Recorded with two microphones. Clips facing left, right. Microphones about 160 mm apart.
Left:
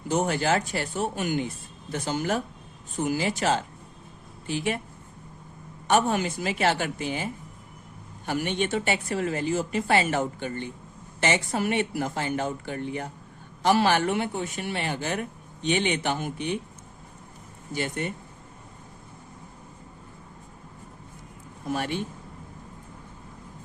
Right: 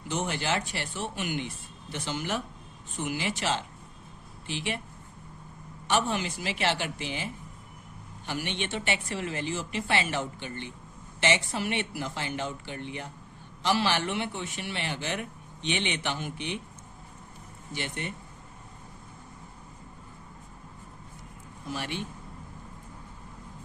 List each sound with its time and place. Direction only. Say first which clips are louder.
0.1 s speech: left 6 dB; 45° left (ahead or behind)
5.9 s speech: left 5 dB; 50° left (ahead or behind)
8.3 s speech: left 6 dB; 45° left (ahead or behind)
17.7 s speech: left 6 dB; 45° left (ahead or behind)
21.7 s speech: left 6 dB; 50° left (ahead or behind)